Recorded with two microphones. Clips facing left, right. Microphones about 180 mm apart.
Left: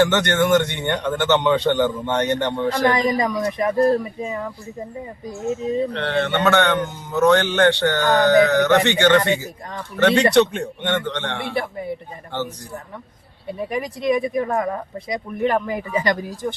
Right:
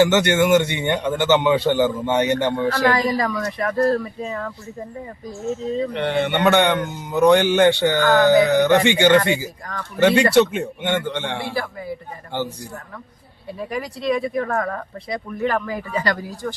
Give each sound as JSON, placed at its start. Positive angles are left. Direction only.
{"t": 0.0, "sound": "a man's voice", "side_deg": -10}
{"t": 2.6, "sound": "speech", "side_deg": 20}
{"t": 5.9, "sound": "a man's voice", "side_deg": -15}
{"t": 11.5, "sound": "speech", "side_deg": 25}
{"t": 12.3, "sound": "a man's voice", "side_deg": -10}
{"t": 13.5, "sound": "speech", "side_deg": 20}